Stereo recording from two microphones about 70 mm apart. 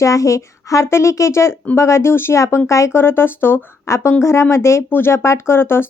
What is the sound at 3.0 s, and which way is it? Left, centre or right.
Speech, left.